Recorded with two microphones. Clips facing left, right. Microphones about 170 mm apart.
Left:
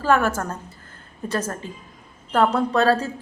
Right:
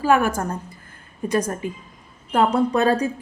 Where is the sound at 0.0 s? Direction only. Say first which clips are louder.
Right 1 dB; 10° right (ahead or behind).